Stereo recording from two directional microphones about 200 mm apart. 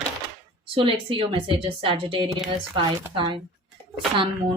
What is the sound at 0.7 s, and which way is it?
A woman's voice, 25° right (ahead or behind).